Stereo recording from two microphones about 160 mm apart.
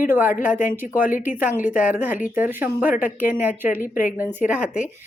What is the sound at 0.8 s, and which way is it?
Speech, 55° left (ahead or behind).